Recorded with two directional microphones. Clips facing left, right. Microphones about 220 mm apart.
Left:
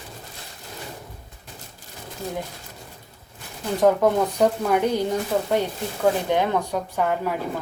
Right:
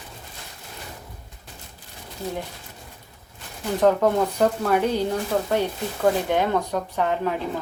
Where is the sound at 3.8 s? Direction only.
10° left (ahead or behind).